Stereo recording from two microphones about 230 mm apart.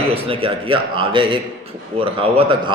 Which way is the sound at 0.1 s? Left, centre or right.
Right.